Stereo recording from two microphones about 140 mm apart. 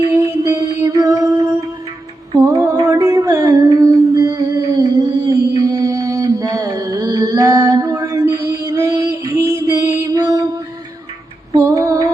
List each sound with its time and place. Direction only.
0.1 s music: 20° right (ahead or behind)
11.5 s female singing: 25° right (ahead or behind)